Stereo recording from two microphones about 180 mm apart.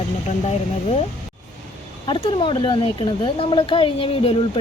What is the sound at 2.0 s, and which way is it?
Speech, 25° left (ahead or behind).